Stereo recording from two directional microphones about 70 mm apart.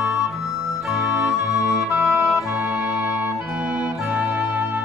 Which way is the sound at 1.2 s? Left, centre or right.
Centre.